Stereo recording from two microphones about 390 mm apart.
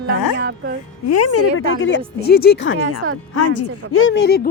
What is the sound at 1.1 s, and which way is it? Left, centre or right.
A woman's voice, left.